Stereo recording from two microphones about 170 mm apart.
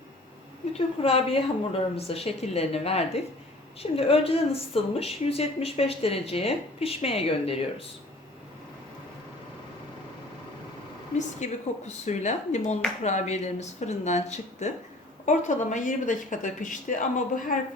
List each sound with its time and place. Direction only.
0.7 s speech: 35° left (ahead or behind)
11.3 s speech: 45° left (ahead or behind)